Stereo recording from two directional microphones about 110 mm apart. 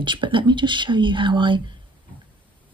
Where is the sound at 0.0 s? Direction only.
45° right (ahead or behind).